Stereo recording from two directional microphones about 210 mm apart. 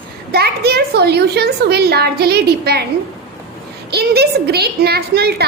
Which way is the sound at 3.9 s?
50° right (ahead or behind).